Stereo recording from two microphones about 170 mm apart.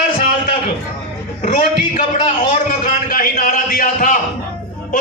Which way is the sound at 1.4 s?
50° left (ahead or behind).